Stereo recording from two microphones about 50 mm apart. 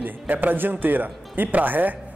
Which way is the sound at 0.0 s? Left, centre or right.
Right.